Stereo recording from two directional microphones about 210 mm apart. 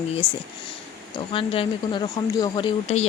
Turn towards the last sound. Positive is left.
turn(degrees=30)  # may be behind; listen again after turning